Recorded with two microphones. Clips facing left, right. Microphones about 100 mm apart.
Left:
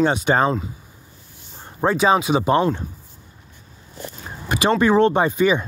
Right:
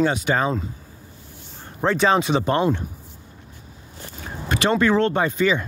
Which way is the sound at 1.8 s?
15° left (ahead or behind).